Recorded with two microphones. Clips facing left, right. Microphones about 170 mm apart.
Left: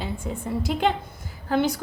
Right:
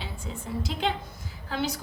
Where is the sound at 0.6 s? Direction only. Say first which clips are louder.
Left 6 dB; 55° left (ahead or behind).